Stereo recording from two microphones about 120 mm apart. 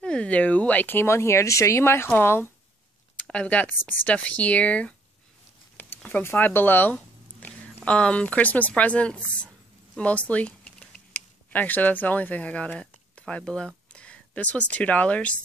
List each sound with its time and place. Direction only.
0.0 s speech: 10° left (ahead or behind)